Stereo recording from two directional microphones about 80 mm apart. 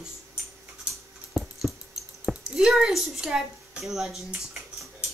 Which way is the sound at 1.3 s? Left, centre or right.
Centre.